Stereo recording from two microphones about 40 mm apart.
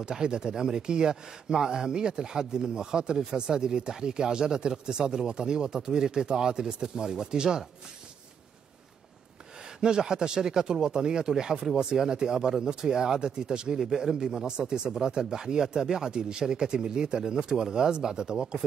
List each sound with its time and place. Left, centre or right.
0.1 s speech: centre
9.8 s speech: centre
13.7 s speech: centre